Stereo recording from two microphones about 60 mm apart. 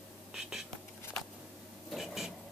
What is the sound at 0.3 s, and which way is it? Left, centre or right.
Whispering, centre.